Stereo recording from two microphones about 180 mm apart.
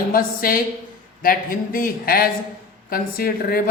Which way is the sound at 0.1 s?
55° left (ahead or behind).